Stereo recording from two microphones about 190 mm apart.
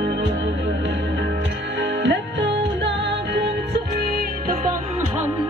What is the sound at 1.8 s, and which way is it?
Music, 70° right (ahead or behind).